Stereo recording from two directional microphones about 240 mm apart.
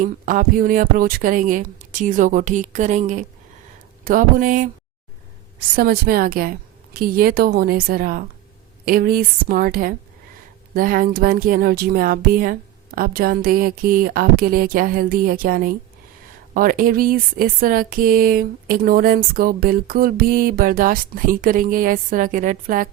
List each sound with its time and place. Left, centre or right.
0.0 s speech: right